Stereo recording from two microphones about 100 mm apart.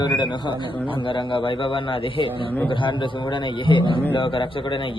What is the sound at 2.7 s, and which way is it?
Speech, 55° left (ahead or behind).